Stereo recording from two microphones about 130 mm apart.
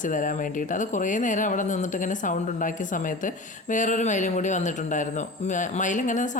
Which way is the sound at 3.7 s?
75° left (ahead or behind).